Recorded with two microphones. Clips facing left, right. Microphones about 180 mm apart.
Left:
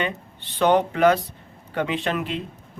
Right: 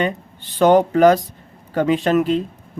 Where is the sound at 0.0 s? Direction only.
40° right (ahead or behind).